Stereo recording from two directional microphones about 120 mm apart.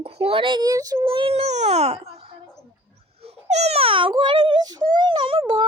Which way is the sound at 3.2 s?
60° right (ahead or behind).